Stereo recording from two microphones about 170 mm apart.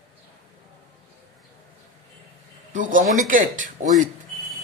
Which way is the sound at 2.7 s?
50° right (ahead or behind).